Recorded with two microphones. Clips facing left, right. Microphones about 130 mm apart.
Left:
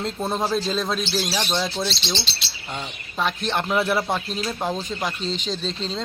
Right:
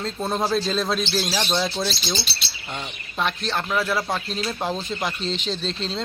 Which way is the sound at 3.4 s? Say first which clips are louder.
Left 2 dB; 20° left (ahead or behind).